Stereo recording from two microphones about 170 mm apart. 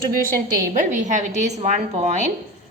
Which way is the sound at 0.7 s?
45° right (ahead or behind).